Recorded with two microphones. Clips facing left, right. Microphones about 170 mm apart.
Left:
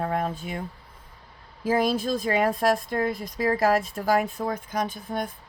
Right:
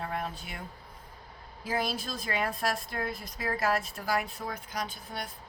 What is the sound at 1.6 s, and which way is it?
Speech, 50° left (ahead or behind).